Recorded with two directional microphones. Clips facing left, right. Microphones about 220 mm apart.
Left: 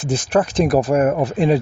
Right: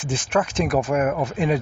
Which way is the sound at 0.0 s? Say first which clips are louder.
Left 5 dB; 40° left (ahead or behind).